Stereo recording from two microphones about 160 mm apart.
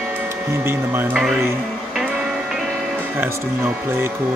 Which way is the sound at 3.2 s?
15° right (ahead or behind).